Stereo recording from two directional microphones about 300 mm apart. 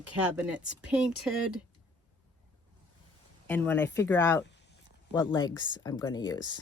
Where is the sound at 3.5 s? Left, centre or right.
Centre.